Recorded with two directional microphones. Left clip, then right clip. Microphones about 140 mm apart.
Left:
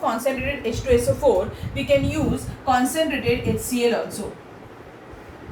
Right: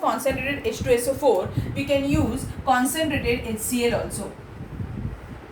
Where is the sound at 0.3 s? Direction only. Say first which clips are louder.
Left 1 dB; 40° right (ahead or behind).